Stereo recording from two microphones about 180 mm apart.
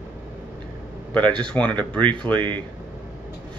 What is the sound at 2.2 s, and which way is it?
Speech, 25° right (ahead or behind).